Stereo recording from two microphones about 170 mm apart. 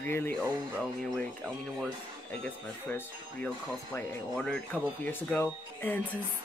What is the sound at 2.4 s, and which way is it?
Speech, 10° left (ahead or behind).